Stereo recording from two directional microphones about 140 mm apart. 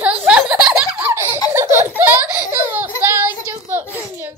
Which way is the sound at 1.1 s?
20° right (ahead or behind).